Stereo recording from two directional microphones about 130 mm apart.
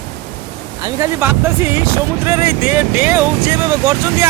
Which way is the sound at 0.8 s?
25° right (ahead or behind).